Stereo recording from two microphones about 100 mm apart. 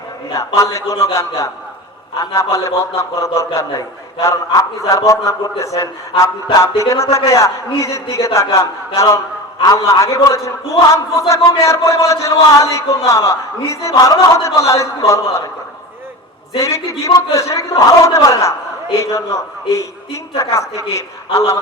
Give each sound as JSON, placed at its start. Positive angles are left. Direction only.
{"t": 0.3, "sound": "a man's voice", "side_deg": 30}
{"t": 16.6, "sound": "a man's voice", "side_deg": 30}